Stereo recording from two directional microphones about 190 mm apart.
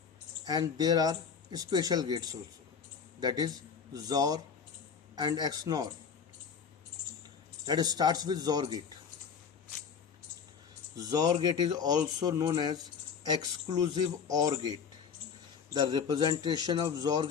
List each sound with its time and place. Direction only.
0.4 s a man's voice: 20° right (ahead or behind)
7.6 s speech: 20° right (ahead or behind)
10.9 s speech: 20° right (ahead or behind)